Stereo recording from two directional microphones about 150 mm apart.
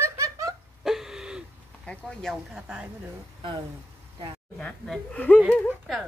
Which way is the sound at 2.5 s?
5° right (ahead or behind).